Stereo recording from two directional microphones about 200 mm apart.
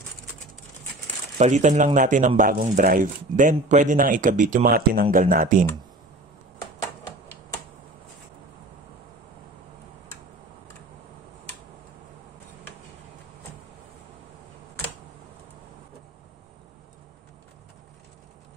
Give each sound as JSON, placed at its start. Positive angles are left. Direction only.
{"t": 1.4, "sound": "speech", "side_deg": -35}